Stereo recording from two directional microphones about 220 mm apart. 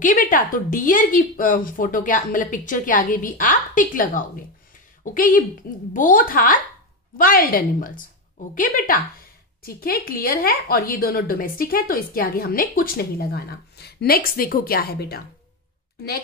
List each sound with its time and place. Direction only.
0.0 s a woman's voice: 35° left (ahead or behind)